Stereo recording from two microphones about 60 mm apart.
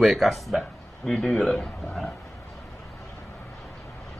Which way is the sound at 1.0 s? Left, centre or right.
Centre.